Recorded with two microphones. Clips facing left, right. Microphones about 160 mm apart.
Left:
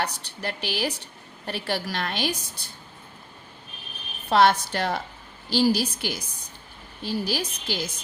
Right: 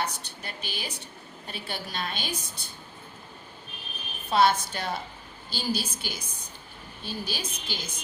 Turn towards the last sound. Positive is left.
turn(degrees=80)